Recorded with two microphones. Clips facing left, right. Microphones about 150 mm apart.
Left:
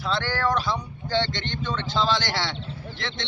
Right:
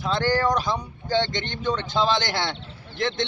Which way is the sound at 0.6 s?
45° right (ahead or behind).